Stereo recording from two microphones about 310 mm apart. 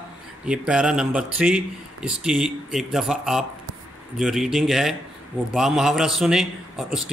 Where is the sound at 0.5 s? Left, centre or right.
Centre.